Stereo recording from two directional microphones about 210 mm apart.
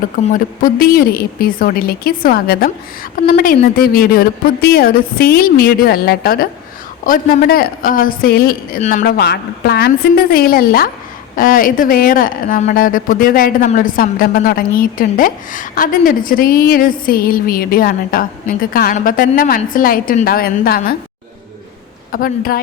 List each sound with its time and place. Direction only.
0.3 s speech: 40° left (ahead or behind)
22.1 s speech: 45° left (ahead or behind)